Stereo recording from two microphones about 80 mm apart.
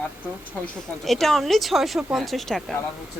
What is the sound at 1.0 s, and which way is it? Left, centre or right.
A woman's voice, centre.